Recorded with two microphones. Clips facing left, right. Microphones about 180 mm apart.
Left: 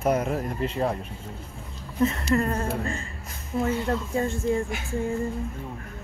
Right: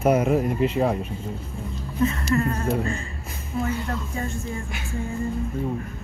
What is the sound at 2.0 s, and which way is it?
Speech, 25° left (ahead or behind).